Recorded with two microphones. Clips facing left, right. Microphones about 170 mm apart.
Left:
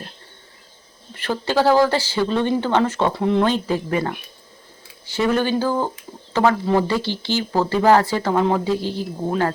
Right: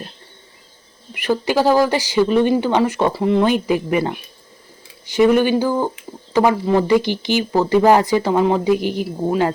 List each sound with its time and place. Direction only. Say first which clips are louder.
1.1 s speech: right 3 dB; 15° right (ahead or behind)
3.1 s speech: right 2 dB; 5° right (ahead or behind)
3.4 s speech: right 3 dB; 15° right (ahead or behind)